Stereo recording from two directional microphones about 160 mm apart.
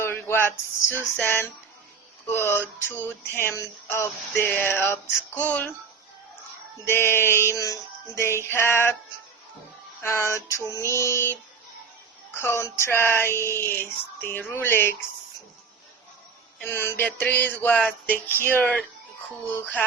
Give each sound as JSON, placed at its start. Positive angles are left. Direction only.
{"t": 0.0, "sound": "a sound", "side_deg": 15}
{"t": 2.2, "sound": "music", "side_deg": 15}
{"t": 6.8, "sound": "music", "side_deg": 15}
{"t": 10.0, "sound": "music", "side_deg": 15}
{"t": 16.6, "sound": "music", "side_deg": 15}